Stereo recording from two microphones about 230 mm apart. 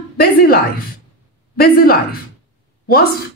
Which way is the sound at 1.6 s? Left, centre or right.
Left.